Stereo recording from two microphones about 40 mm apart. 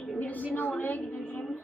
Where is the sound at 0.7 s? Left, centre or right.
Left.